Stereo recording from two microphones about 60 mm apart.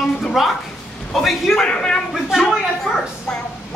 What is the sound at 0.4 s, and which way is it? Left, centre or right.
Speech, centre.